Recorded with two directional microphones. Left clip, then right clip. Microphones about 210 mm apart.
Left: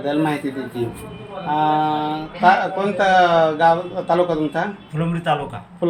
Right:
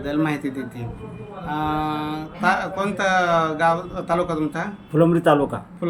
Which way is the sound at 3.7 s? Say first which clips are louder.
Left 4 dB; 10° right (ahead or behind).